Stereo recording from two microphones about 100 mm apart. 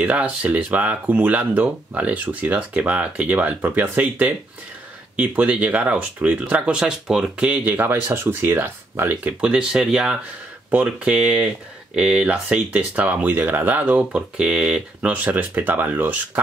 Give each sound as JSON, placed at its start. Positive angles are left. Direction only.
{"t": 0.0, "sound": "speech", "side_deg": -15}